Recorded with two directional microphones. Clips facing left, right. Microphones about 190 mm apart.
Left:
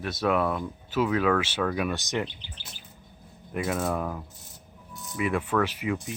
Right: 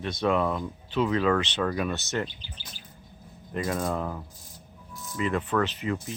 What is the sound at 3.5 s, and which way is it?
Speech, 5° left (ahead or behind).